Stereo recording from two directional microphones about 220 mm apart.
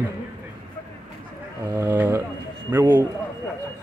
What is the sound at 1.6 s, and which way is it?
Speech, 10° right (ahead or behind).